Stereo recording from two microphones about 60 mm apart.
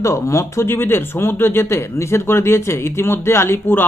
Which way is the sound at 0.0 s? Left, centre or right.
Left.